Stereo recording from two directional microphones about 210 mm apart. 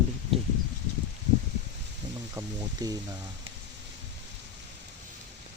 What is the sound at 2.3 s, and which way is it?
Speech, 15° right (ahead or behind).